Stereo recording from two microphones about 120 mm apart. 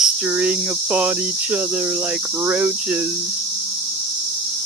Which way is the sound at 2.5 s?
10° right (ahead or behind).